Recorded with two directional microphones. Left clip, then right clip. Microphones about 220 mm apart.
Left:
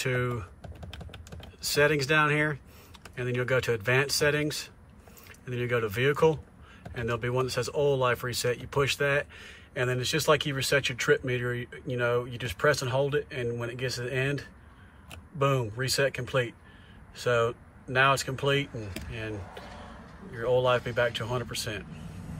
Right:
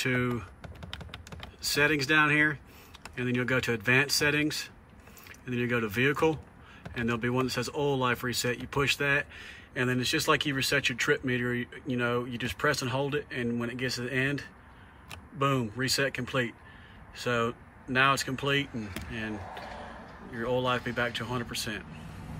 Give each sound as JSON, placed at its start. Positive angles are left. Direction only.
{"t": 0.0, "sound": "a man's voice", "side_deg": -5}
{"t": 0.8, "sound": "typing", "side_deg": -20}
{"t": 1.7, "sound": "a man's voice", "side_deg": -5}
{"t": 19.5, "sound": "a sound", "side_deg": -30}
{"t": 20.3, "sound": "a man's voice", "side_deg": -5}